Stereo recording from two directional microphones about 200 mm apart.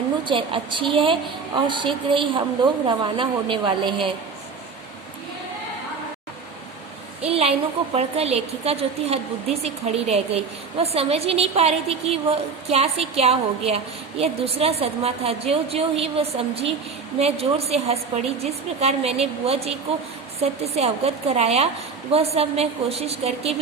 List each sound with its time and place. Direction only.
0.3 s a woman's voice: 25° right (ahead or behind)
7.2 s a woman's voice: 30° right (ahead or behind)